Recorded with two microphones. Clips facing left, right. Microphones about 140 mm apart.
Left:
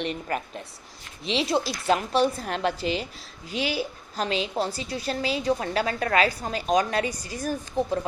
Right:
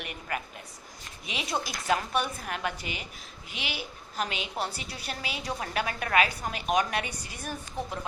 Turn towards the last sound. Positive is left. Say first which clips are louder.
# left 9 dB
turn(degrees=35)  # may be behind; listen again after turning